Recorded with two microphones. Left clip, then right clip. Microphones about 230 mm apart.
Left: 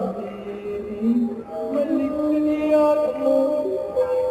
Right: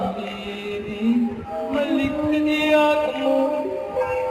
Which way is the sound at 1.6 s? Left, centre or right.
Centre.